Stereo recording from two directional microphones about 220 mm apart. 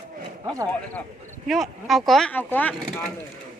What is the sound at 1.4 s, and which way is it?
Speech, centre (ahead or behind).